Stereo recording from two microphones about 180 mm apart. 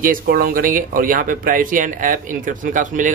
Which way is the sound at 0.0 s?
50° right (ahead or behind).